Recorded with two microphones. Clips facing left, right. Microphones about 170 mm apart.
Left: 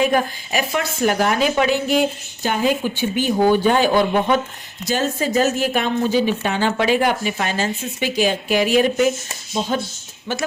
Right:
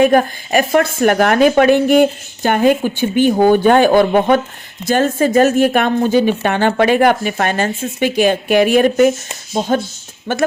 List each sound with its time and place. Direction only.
0.0 s a woman's voice: 55° right (ahead or behind)